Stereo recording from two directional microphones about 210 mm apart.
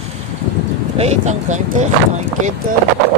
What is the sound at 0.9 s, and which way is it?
Speech, 30° right (ahead or behind).